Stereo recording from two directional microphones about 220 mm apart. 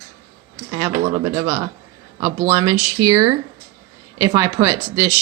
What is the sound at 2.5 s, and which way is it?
Speech, 10° right (ahead or behind).